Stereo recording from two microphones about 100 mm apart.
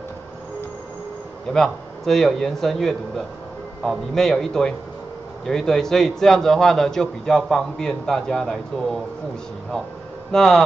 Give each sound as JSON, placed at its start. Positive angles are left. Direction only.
{"t": 1.5, "sound": "a man's voice", "side_deg": 5}
{"t": 10.3, "sound": "a man's voice", "side_deg": 5}